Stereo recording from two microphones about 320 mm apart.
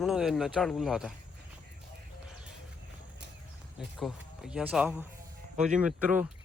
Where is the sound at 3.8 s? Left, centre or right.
Centre.